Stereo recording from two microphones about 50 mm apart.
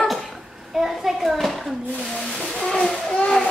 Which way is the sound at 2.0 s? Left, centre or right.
Centre.